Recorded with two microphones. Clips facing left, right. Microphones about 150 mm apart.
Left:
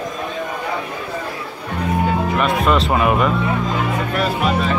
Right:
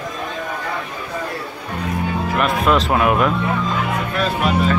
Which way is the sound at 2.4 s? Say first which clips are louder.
Right 2 dB; centre (ahead or behind).